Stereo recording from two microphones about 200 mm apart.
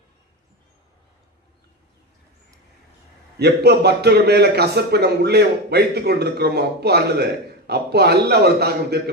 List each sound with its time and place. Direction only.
3.3 s a man's voice: 55° right (ahead or behind)